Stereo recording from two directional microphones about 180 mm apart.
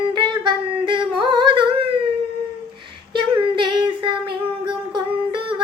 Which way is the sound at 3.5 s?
25° right (ahead or behind).